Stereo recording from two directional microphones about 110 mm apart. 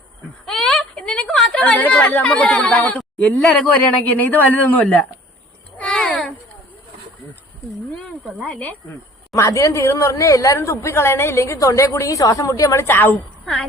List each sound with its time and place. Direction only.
0.4 s a woman's voice: 5° left (ahead or behind)
5.7 s a sound: 10° left (ahead or behind)
7.9 s speech: 5° left (ahead or behind)
9.3 s a woman's voice: 30° left (ahead or behind)